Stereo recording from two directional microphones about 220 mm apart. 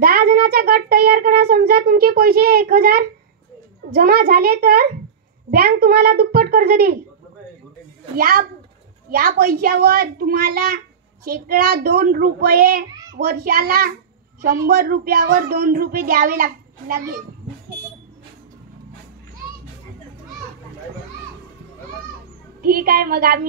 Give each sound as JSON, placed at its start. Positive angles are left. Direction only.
{"t": 0.0, "sound": "a child's voice", "side_deg": -45}
{"t": 8.2, "sound": "a child's voice", "side_deg": -40}
{"t": 22.6, "sound": "speech", "side_deg": -45}